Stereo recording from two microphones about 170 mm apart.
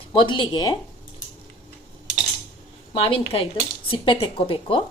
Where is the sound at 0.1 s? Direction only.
25° left (ahead or behind).